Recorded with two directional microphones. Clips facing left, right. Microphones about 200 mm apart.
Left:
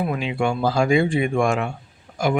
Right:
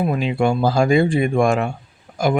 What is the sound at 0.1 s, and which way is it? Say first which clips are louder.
Speech: right 4 dB; 40° right (ahead or behind).